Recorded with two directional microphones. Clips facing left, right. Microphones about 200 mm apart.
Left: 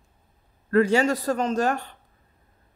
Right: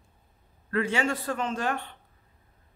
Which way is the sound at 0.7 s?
40° left (ahead or behind).